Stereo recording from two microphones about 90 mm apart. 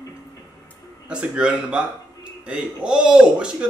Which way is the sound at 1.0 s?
10° right (ahead or behind).